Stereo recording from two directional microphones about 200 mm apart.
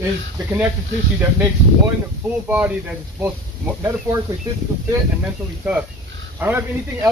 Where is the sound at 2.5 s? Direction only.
5° right (ahead or behind).